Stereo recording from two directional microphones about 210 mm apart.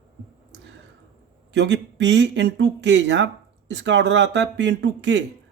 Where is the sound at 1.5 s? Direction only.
55° right (ahead or behind).